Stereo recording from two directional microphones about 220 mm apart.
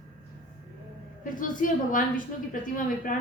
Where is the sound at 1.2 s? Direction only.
35° left (ahead or behind).